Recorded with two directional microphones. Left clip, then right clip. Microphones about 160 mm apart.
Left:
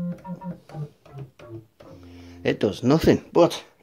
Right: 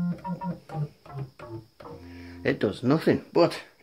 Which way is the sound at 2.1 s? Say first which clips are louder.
Left 3 dB; 25° left (ahead or behind).